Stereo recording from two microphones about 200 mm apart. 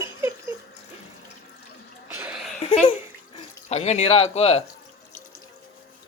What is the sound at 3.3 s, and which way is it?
Water, 35° left (ahead or behind).